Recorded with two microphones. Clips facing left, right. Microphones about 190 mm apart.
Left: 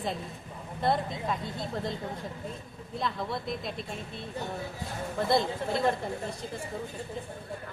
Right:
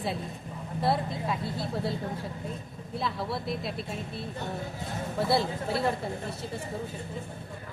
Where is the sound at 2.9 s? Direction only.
5° right (ahead or behind).